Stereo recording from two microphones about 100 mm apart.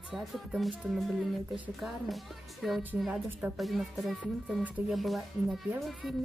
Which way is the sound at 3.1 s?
15° right (ahead or behind).